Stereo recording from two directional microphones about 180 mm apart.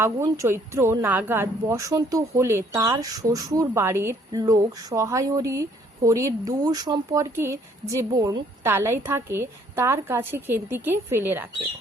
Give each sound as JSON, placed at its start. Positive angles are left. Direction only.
{"t": 0.0, "sound": "speech", "side_deg": -15}